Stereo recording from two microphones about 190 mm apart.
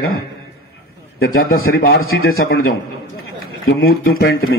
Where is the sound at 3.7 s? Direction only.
55° left (ahead or behind).